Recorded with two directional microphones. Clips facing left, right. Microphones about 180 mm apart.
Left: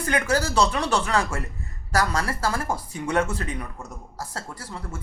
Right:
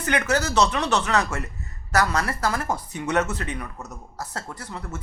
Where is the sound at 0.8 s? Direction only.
10° left (ahead or behind).